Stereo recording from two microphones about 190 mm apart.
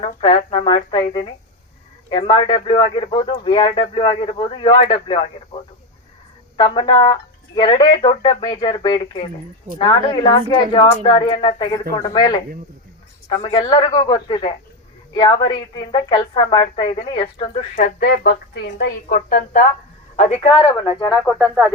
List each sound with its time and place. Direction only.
0.0 s a woman's voice: 30° left (ahead or behind)
6.6 s a woman's voice: 25° left (ahead or behind)
17.7 s a woman's voice: 55° left (ahead or behind)
20.1 s speech: 35° left (ahead or behind)
21.2 s speech: 5° right (ahead or behind)